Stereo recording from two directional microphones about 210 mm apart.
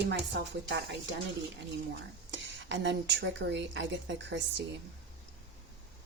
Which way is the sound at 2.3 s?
60° right (ahead or behind).